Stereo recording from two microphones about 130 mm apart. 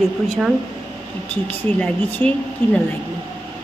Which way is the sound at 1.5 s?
10° left (ahead or behind).